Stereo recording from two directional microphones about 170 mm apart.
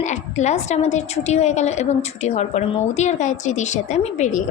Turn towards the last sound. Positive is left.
turn(degrees=45)  # may be behind; listen again after turning